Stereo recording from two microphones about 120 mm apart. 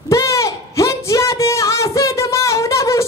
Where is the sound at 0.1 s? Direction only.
25° left (ahead or behind).